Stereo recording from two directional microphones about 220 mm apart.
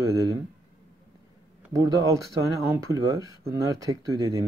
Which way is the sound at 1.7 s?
15° right (ahead or behind).